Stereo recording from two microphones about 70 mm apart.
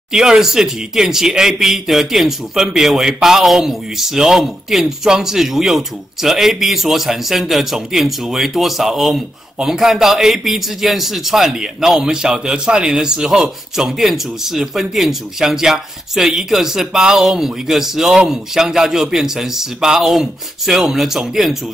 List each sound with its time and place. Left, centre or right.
0.1 s speech: centre